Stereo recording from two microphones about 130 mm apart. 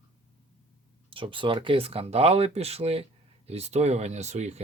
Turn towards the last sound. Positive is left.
turn(degrees=-60)  # may be behind; listen again after turning